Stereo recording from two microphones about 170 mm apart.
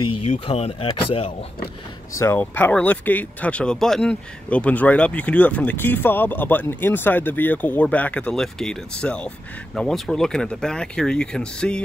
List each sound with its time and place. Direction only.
0.5 s speech: 35° left (ahead or behind)
2.1 s speech: 15° left (ahead or behind)